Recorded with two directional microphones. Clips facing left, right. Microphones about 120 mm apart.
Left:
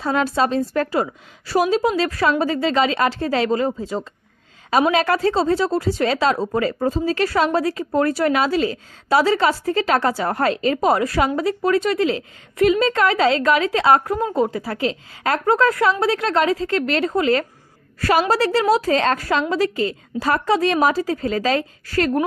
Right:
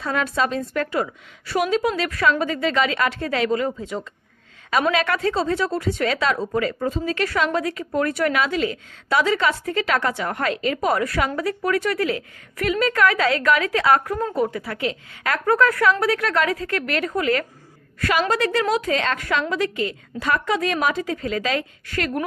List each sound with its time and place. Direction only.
0.0 s a woman's voice: 30° left (ahead or behind)